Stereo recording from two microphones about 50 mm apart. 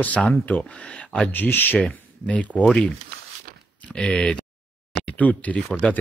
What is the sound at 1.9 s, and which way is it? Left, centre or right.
Speech, left.